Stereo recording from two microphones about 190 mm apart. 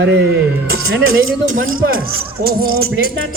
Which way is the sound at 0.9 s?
90° right.